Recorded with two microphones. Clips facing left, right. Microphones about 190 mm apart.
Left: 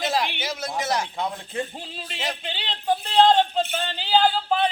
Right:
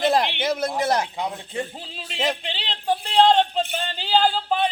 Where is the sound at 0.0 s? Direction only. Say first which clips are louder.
Right 5 dB; 55° right (ahead or behind).